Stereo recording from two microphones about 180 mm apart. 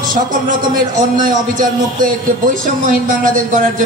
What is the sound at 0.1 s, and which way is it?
A man's voice, 50° right (ahead or behind).